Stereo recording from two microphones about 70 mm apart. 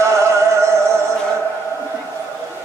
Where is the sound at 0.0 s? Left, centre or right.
Right.